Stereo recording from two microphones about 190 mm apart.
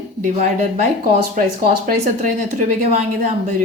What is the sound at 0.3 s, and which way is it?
Speech, 40° right (ahead or behind).